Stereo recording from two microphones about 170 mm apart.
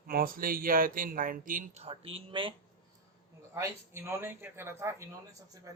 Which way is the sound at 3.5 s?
15° right (ahead or behind).